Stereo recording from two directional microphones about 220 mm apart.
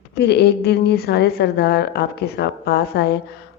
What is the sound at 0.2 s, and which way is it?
Speech, 50° left (ahead or behind).